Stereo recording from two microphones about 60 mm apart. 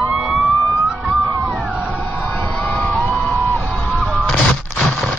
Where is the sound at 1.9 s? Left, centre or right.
Left.